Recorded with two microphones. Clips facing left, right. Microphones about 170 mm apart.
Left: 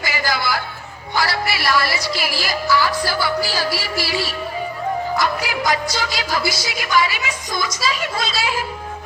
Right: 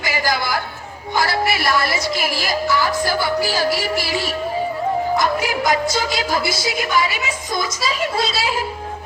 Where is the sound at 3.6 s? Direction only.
45° right (ahead or behind).